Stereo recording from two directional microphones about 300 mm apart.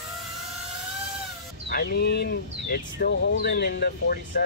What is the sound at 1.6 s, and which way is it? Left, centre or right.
Speech, left.